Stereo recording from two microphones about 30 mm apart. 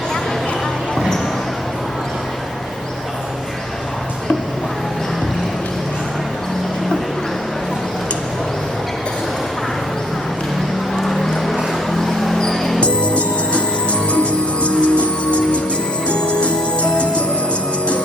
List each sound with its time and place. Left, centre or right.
11.0 s a sound: centre
12.5 s music: centre
12.8 s music: left